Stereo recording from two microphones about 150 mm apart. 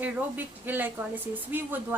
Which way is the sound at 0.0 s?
10° right (ahead or behind).